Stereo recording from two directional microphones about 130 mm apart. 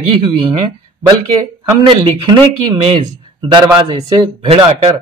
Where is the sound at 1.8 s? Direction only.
35° right (ahead or behind).